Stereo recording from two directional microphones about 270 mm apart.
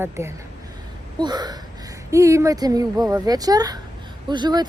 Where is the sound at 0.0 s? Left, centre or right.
Centre.